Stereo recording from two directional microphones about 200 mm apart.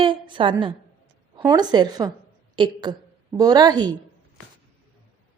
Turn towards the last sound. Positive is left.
turn(degrees=-20)  # may be behind; listen again after turning